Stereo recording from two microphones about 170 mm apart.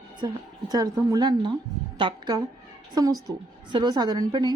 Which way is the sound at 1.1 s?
25° right (ahead or behind).